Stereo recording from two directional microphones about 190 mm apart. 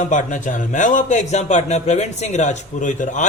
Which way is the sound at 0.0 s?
40° left (ahead or behind).